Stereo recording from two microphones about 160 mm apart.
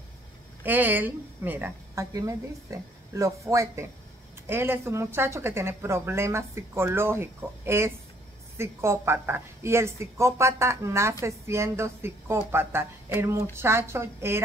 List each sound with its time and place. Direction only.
0.7 s speech: 10° right (ahead or behind)